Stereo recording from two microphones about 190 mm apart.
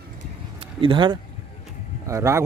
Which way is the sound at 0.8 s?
25° right (ahead or behind).